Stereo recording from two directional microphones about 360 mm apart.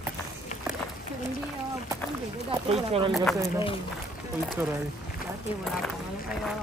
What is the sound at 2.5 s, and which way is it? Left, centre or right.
Speech, centre.